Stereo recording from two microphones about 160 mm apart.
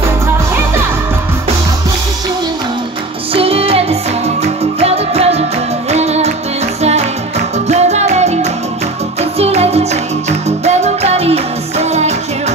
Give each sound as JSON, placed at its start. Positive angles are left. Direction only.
{"t": 3.3, "sound": "music", "side_deg": -35}
{"t": 7.6, "sound": "music", "side_deg": -45}